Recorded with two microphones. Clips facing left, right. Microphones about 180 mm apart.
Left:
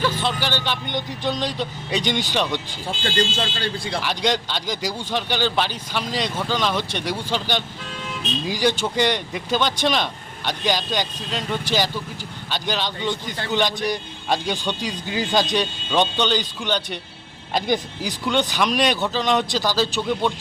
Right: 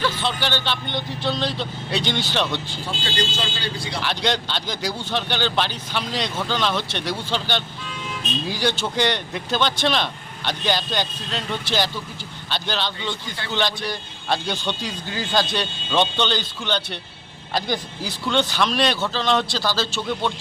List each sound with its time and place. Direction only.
0.0 s speech: 10° left (ahead or behind)
3.2 s speech: 50° left (ahead or behind)
4.0 s speech: 10° left (ahead or behind)